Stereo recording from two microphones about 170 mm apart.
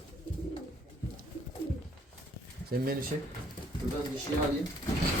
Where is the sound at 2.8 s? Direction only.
60° right (ahead or behind).